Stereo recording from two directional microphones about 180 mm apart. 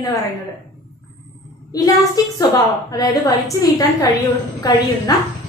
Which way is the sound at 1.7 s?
20° left (ahead or behind).